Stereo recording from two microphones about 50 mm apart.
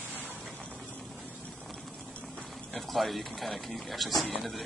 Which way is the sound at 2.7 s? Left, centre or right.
Centre.